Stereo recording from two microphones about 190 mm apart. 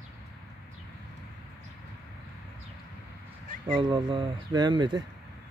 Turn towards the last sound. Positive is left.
turn(degrees=-25)  # may be behind; listen again after turning